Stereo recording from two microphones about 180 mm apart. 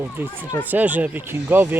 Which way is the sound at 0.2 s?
10° right (ahead or behind).